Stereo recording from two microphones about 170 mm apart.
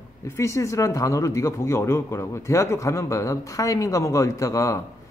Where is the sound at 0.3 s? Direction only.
15° left (ahead or behind).